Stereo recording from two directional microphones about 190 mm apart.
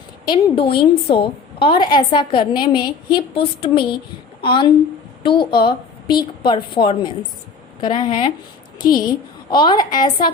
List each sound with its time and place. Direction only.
0.3 s a woman's voice: 25° left (ahead or behind)
9.5 s a woman's voice: 25° left (ahead or behind)